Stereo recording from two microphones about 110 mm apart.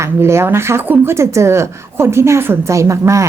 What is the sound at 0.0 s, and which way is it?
A woman's voice, 25° right (ahead or behind).